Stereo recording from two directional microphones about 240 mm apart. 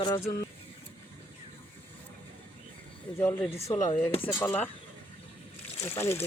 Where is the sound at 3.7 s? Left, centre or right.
Left.